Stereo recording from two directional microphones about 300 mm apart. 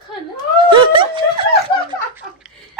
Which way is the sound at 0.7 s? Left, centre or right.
Centre.